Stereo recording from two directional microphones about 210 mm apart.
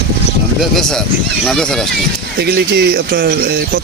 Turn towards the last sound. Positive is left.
turn(degrees=-45)  # may be behind; listen again after turning